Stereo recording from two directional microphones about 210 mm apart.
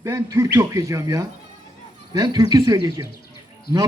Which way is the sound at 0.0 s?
15° right (ahead or behind).